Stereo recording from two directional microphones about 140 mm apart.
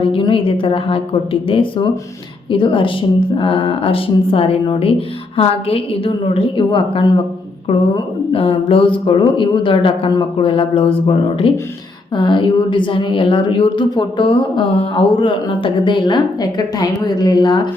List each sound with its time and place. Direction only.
0.0 s a woman's voice: 40° left (ahead or behind)